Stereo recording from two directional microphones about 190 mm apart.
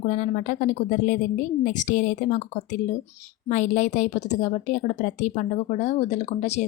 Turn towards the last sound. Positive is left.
turn(degrees=35)  # may be behind; listen again after turning